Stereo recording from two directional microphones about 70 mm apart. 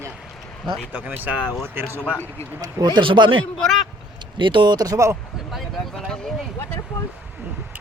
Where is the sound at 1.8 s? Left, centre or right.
Right.